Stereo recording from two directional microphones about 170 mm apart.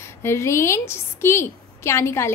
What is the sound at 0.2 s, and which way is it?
A woman's voice, 15° left (ahead or behind).